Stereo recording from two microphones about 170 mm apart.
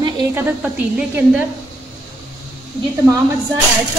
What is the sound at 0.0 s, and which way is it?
A woman's voice, 15° right (ahead or behind).